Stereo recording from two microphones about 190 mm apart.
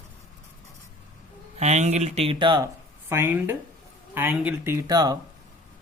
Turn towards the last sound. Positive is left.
turn(degrees=-20)  # may be behind; listen again after turning